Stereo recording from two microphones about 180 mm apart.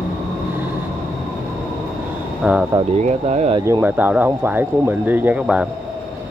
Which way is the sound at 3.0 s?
40° right (ahead or behind).